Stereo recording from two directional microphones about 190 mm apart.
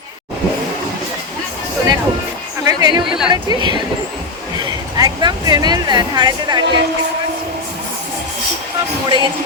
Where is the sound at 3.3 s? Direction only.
25° right (ahead or behind).